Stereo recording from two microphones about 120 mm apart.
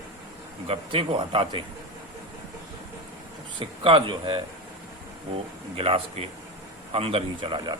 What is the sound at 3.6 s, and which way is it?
Speech, 45° right (ahead or behind).